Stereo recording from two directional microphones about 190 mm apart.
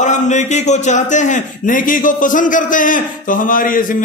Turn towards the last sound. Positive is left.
turn(degrees=45)  # may be behind; listen again after turning